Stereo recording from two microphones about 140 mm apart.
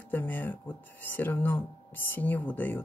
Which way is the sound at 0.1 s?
15° left (ahead or behind).